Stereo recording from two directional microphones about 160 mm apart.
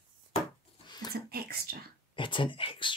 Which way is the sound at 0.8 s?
25° left (ahead or behind).